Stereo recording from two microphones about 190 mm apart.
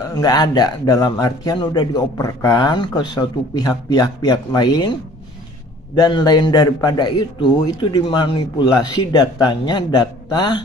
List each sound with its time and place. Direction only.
0.1 s speech: 20° left (ahead or behind)
5.9 s speech: 20° left (ahead or behind)